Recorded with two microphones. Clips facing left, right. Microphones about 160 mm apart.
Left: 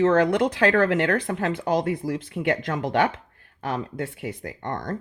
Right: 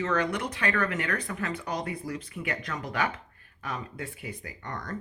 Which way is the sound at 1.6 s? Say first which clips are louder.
Left 9 dB; 85° left.